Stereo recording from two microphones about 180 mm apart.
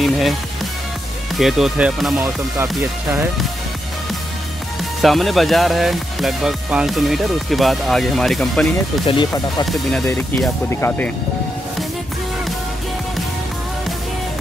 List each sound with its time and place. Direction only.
0.0 s music: centre (ahead or behind)
1.3 s speech: centre (ahead or behind)
5.0 s speech: centre (ahead or behind)
9.0 s speech: 25° left (ahead or behind)
9.7 s speech: 5° left (ahead or behind)